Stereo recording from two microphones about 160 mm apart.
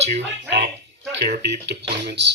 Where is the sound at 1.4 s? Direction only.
90° right.